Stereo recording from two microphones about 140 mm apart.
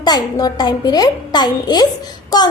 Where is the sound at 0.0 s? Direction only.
30° left (ahead or behind).